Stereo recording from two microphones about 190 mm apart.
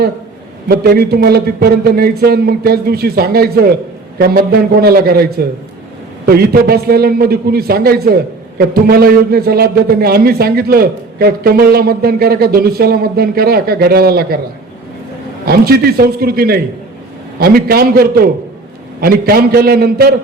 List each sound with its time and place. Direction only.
0.7 s a man's voice: 55° right (ahead or behind)
15.4 s a man's voice: 55° right (ahead or behind)